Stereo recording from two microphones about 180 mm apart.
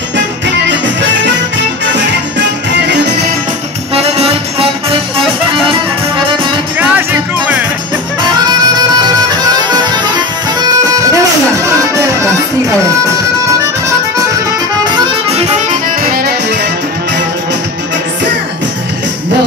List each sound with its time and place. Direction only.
3.9 s music: 35° right (ahead or behind)
5.7 s music: 30° right (ahead or behind)
6.8 s music: 10° right (ahead or behind)
9.4 s music: 25° right (ahead or behind)
11.9 s music: 15° right (ahead or behind)
16.0 s music: 55° right (ahead or behind)